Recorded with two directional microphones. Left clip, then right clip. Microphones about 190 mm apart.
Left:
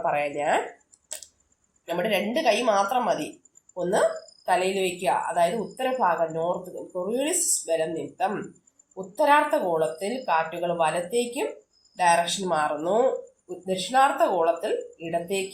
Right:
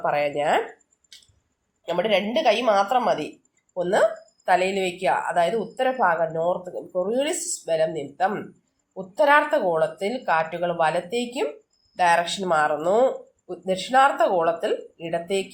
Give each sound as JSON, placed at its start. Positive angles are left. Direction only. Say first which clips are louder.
{"t": 0.0, "sound": "speech", "louder": "right 3 dB", "side_deg": -40}
{"t": 1.8, "sound": "speech", "louder": "right 3 dB", "side_deg": -40}